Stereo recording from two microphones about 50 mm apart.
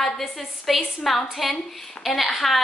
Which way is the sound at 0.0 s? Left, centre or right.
Centre.